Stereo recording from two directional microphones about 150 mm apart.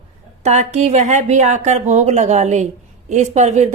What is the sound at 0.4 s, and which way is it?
A woman's voice, 45° right (ahead or behind).